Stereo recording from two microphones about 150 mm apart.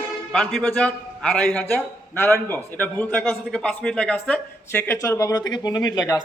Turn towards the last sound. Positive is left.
turn(degrees=25)  # may be behind; listen again after turning